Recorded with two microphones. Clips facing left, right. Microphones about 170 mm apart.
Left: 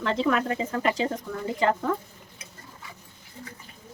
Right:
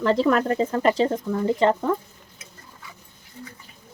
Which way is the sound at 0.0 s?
40° right (ahead or behind).